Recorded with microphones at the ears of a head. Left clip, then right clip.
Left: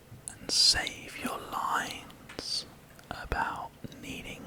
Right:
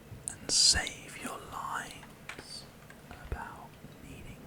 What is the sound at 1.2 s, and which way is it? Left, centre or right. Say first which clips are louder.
Whispering: left 7 dB; left.